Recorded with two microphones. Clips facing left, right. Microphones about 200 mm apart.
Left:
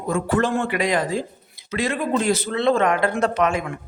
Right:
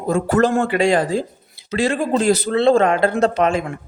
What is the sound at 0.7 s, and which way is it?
Speech, 30° right (ahead or behind).